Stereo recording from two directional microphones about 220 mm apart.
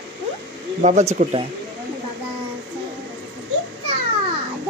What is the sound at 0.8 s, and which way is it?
Speech, 30° right (ahead or behind).